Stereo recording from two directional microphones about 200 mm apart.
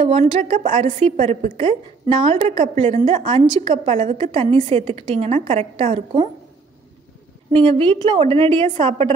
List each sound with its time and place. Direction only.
0.0 s a woman's voice: 30° right (ahead or behind)
7.5 s a woman's voice: 25° right (ahead or behind)